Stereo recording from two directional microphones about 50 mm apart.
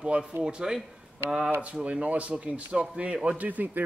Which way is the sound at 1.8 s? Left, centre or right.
Right.